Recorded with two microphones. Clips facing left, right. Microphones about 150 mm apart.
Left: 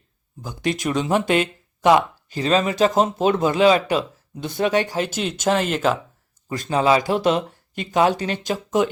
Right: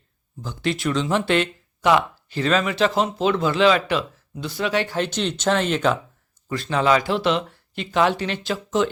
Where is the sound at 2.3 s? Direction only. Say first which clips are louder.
Left 1 dB; 35° left (ahead or behind).